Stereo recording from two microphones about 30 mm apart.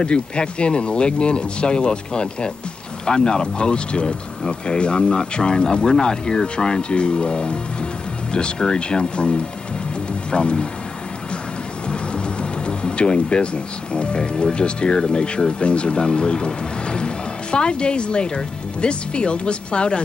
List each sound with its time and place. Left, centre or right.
0.0 s speech: left
11.9 s music: left
14.1 s speech: left
15.6 s speech: left